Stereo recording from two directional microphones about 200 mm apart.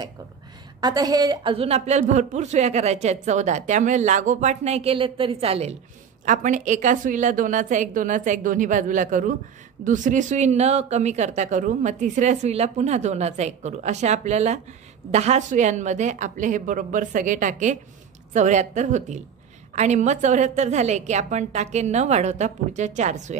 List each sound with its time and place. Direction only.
0.7 s speech: 20° right (ahead or behind); by 23.3 s 35° right (ahead or behind)